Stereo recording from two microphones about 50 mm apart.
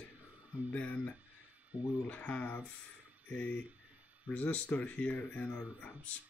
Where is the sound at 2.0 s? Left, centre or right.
Left.